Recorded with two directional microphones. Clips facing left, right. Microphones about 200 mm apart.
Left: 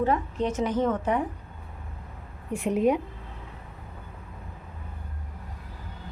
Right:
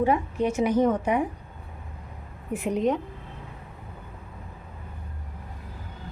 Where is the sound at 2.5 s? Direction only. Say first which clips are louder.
Left 1 dB; centre (ahead or behind).